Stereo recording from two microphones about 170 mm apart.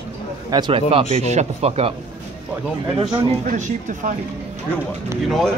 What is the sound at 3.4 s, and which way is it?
Speech, 50° right (ahead or behind).